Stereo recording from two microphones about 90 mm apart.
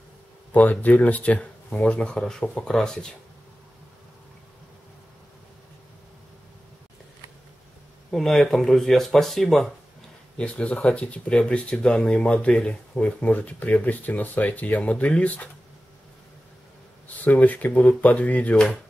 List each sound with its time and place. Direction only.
0.5 s speech: 20° left (ahead or behind)
8.1 s speech: 5° left (ahead or behind)
17.2 s speech: 20° left (ahead or behind)